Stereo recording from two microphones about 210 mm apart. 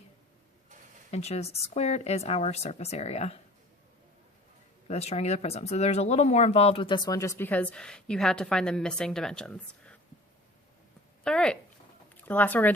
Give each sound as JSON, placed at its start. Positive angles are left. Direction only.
{"t": 1.1, "sound": "speech", "side_deg": 30}
{"t": 4.9, "sound": "speech", "side_deg": 30}
{"t": 11.2, "sound": "speech", "side_deg": 5}